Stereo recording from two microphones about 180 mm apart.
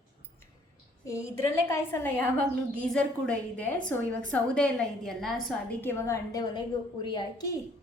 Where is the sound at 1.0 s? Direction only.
15° left (ahead or behind).